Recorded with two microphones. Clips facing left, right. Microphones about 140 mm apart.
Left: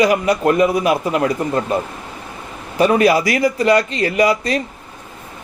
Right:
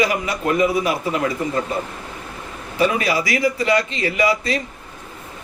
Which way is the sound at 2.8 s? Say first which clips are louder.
Left 6 dB; 45° left (ahead or behind).